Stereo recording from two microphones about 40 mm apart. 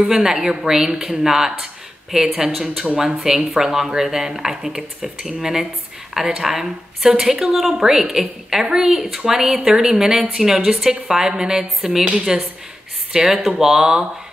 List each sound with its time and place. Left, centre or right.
0.1 s speech: centre